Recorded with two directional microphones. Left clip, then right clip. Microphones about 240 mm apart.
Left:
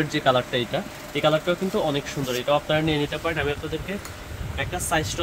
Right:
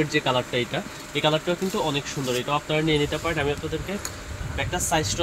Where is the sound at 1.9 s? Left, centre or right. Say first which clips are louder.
Even; centre.